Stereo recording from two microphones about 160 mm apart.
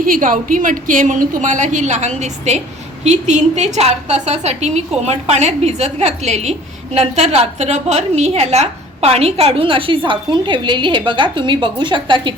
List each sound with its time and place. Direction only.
0.0 s a woman's voice: 60° right (ahead or behind); by 12.3 s 30° right (ahead or behind)